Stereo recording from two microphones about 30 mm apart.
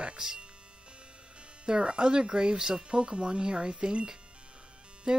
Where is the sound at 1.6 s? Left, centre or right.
Right.